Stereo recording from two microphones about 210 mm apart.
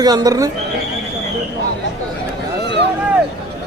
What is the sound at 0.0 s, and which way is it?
Speech, 20° right (ahead or behind).